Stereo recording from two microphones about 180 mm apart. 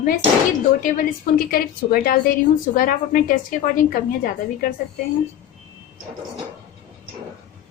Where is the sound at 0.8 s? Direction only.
50° left (ahead or behind).